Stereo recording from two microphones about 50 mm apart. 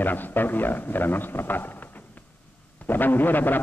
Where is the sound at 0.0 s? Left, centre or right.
Left.